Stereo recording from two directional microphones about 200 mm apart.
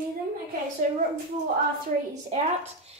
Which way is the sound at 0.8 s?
40° right (ahead or behind).